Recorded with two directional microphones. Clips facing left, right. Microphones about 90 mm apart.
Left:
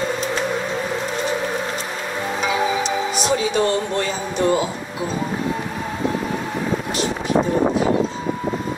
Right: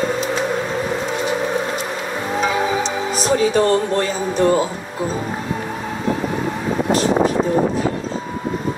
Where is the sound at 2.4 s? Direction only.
40° right (ahead or behind).